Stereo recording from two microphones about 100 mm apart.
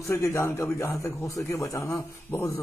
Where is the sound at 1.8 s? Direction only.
25° left (ahead or behind).